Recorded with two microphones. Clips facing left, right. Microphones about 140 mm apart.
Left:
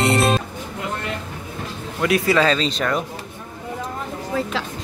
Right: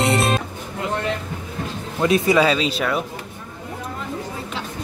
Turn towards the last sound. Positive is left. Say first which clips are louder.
# even
turn(degrees=-5)  # may be behind; listen again after turning